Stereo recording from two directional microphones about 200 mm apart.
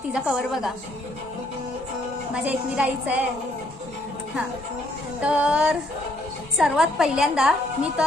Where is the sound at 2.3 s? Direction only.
5° right (ahead or behind).